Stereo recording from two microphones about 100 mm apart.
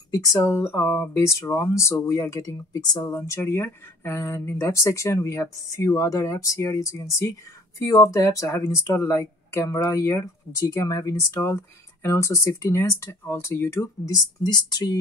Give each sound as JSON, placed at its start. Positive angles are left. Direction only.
{"t": 0.2, "sound": "speech", "side_deg": 30}
{"t": 3.2, "sound": "speech", "side_deg": 30}